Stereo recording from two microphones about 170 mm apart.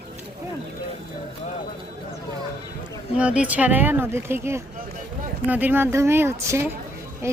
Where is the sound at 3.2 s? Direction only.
5° right (ahead or behind).